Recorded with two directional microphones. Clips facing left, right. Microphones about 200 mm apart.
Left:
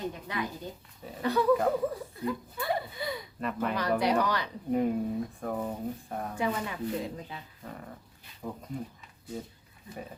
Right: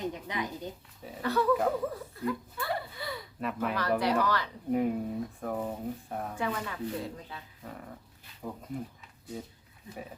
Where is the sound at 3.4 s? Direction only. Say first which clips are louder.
Even; 5° right (ahead or behind).